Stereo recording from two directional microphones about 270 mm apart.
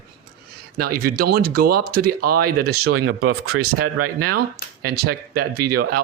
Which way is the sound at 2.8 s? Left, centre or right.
Right.